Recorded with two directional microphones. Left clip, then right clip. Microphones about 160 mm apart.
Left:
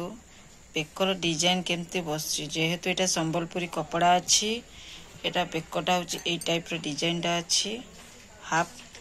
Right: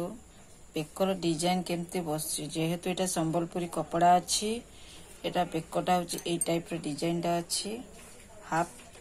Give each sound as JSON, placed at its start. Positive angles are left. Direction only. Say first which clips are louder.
{"t": 0.7, "sound": "a woman's voice", "louder": "left 3 dB", "side_deg": -25}
{"t": 6.7, "sound": "speech", "louder": "left 3 dB", "side_deg": -15}